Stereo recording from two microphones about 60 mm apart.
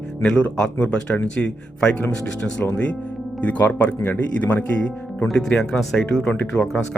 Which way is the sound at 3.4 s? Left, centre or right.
Left.